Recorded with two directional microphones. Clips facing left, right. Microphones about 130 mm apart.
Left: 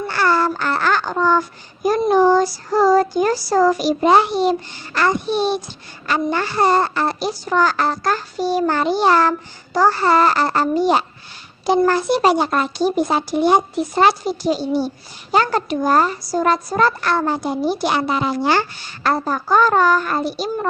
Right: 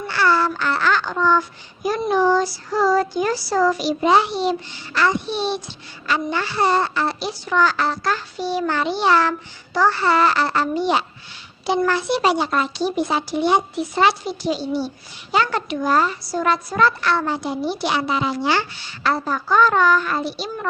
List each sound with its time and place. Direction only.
0.1 s speech: 45° left (ahead or behind)